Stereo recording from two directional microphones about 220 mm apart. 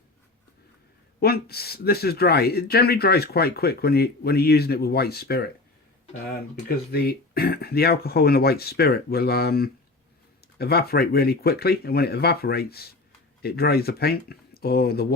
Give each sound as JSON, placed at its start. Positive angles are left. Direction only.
{"t": 1.2, "sound": "speech", "side_deg": 45}
{"t": 6.9, "sound": "speech", "side_deg": 45}